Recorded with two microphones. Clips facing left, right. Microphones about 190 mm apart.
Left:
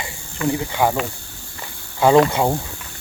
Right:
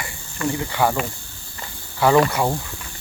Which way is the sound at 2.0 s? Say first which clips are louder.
Left 3 dB; 20° left (ahead or behind).